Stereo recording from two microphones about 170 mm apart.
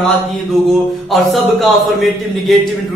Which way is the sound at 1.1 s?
Centre (ahead or behind).